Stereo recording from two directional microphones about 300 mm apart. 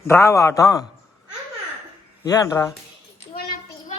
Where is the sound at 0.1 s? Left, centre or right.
Centre.